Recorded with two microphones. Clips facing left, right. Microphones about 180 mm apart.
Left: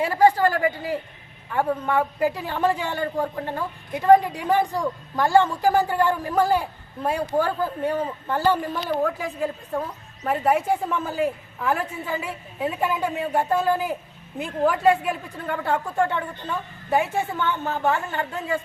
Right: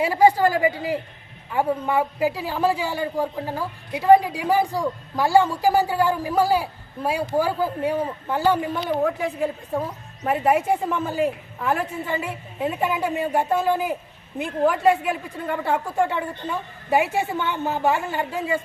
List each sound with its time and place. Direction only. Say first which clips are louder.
0.0 s a woman's voice: right 1 dB; 10° right (ahead or behind)